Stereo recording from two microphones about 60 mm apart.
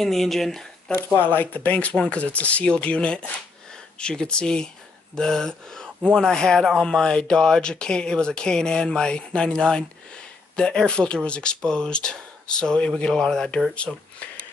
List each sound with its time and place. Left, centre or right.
0.0 s speech: centre
1.3 s speech: left; by 14.0 s centre